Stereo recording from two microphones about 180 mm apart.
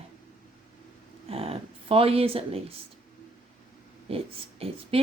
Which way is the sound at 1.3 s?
30° right (ahead or behind).